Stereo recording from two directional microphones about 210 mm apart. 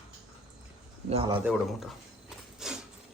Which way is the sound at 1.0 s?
25° right (ahead or behind).